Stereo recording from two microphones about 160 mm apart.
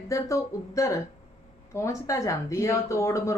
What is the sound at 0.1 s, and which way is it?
Speech, 20° left (ahead or behind).